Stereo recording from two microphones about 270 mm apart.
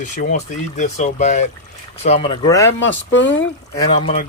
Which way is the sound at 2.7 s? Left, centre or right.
Left.